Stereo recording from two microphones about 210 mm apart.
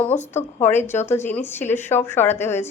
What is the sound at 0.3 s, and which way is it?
A woman's voice, 10° left (ahead or behind).